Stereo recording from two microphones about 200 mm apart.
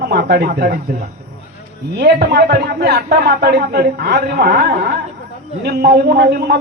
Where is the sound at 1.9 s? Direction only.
55° right (ahead or behind).